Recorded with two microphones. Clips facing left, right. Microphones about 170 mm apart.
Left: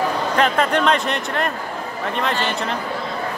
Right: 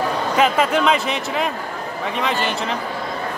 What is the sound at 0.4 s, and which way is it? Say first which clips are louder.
Speech: right 1 dB; 5° right (ahead or behind).